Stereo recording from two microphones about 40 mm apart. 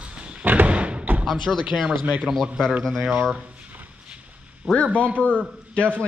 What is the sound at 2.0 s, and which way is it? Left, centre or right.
Speech, right.